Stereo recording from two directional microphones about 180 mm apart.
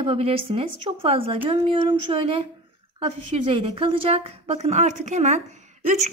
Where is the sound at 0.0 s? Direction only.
35° right (ahead or behind).